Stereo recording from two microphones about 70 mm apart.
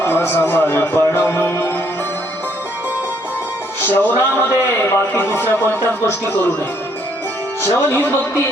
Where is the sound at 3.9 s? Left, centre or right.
Left.